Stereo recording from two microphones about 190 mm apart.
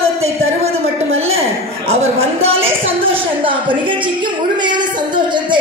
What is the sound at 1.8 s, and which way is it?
A woman's voice, 30° right (ahead or behind).